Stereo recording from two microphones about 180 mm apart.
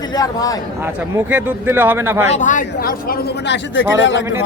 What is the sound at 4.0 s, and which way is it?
Speech, 90° left.